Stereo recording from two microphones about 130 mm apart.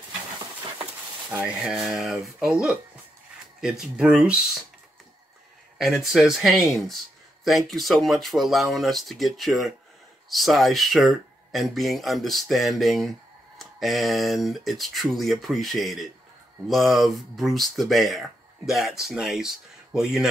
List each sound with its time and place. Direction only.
1.3 s speech: 5° right (ahead or behind)
5.8 s speech: centre (ahead or behind)